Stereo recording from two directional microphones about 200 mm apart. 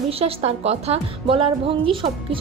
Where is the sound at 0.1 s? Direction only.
30° right (ahead or behind).